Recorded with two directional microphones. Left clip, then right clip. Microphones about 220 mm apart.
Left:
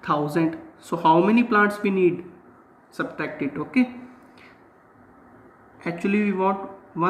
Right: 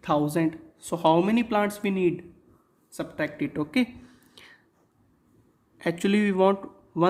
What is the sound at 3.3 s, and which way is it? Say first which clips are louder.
Speech: left 5 dB; 50° right (ahead or behind).